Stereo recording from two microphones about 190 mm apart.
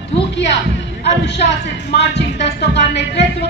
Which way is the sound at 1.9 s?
65° left (ahead or behind).